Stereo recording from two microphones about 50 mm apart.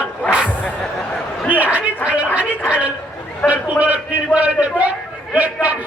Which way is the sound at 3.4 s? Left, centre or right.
Right.